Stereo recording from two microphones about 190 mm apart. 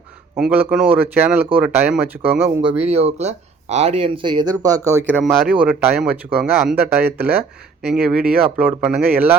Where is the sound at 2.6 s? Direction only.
30° right (ahead or behind); by 6.7 s 5° right (ahead or behind).